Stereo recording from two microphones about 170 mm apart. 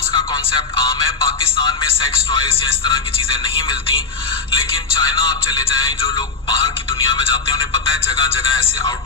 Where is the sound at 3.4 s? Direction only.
30° left (ahead or behind).